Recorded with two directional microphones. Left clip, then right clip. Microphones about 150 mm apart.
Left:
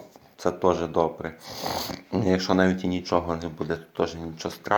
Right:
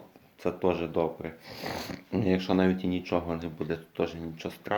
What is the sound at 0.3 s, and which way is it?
Speech, 15° right (ahead or behind).